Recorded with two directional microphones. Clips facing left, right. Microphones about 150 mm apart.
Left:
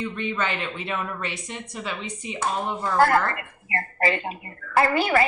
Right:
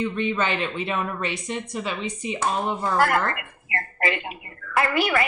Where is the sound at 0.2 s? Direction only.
25° right (ahead or behind).